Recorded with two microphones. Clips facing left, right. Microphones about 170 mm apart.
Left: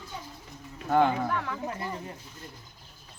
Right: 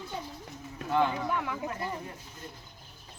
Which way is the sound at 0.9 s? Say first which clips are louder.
Left 4 dB; 40° left (ahead or behind).